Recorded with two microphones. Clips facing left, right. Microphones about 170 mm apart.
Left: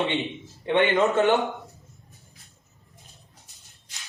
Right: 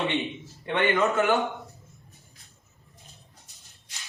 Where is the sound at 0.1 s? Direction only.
20° left (ahead or behind).